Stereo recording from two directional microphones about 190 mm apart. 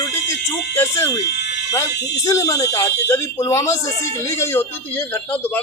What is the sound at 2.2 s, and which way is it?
Speech, 15° left (ahead or behind).